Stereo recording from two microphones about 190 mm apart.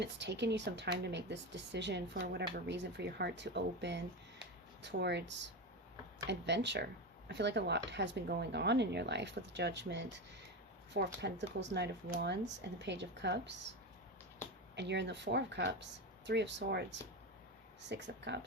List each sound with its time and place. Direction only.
0.0 s speech: 65° right (ahead or behind)
14.8 s speech: 65° right (ahead or behind)